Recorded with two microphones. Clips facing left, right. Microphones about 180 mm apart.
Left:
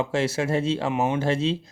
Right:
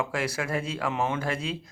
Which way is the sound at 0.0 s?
25° left (ahead or behind).